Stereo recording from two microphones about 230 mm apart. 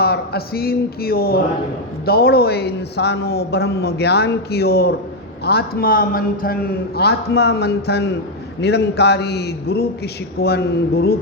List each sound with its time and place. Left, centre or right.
0.0 s a man's voice: left